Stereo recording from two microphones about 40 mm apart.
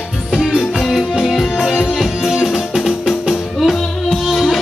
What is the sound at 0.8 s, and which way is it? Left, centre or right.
Music, centre.